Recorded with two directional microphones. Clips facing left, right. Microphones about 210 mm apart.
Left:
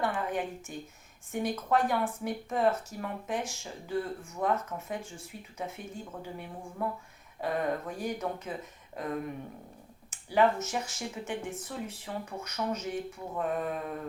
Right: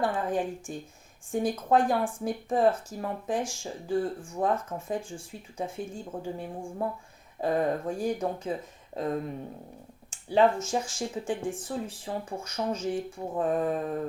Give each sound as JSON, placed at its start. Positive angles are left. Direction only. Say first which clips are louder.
{"t": 0.0, "sound": "speech", "louder": "right 4 dB", "side_deg": -30}